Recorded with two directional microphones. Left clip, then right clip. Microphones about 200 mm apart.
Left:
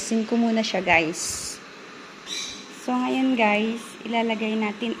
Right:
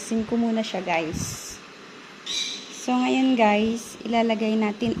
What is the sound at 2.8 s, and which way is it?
Speech, 20° right (ahead or behind).